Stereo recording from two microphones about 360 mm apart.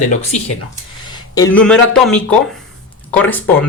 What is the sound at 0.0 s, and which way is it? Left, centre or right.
Speech, centre.